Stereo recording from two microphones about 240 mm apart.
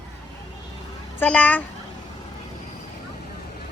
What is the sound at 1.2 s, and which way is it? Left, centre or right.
Speech, centre.